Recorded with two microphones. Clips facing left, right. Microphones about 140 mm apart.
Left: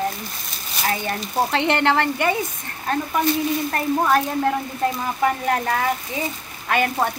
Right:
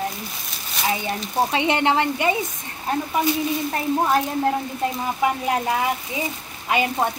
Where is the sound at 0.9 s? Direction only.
15° right (ahead or behind).